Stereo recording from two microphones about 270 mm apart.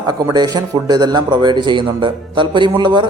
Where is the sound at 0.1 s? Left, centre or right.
Centre.